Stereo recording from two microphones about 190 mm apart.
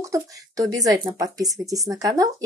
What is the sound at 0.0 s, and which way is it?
Speech, 15° right (ahead or behind).